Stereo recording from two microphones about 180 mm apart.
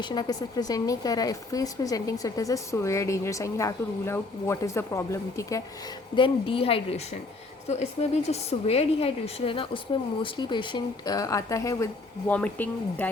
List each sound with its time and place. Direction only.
0.0 s speech: 25° left (ahead or behind)
6.1 s speech: 30° left (ahead or behind); by 13.1 s 10° left (ahead or behind)